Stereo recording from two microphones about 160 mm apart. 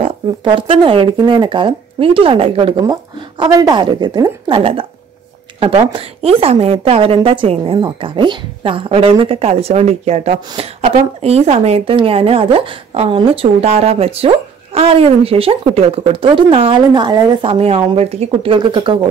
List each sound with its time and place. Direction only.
0.0 s a woman's voice: 30° right (ahead or behind)
2.8 s a woman's voice: 25° right (ahead or behind)